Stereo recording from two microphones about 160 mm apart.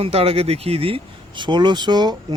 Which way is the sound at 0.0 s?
40° right (ahead or behind).